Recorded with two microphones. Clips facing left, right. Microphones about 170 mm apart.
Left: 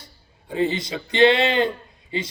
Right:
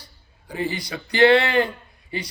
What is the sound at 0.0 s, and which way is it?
A man's voice, 25° left (ahead or behind).